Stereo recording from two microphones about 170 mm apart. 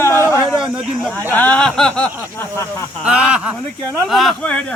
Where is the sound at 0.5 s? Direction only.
5° right (ahead or behind).